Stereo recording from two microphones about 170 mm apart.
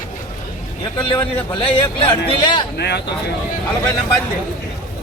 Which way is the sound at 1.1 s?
35° left (ahead or behind).